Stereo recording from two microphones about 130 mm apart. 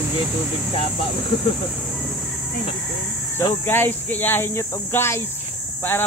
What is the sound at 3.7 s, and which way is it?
Speech, 15° left (ahead or behind).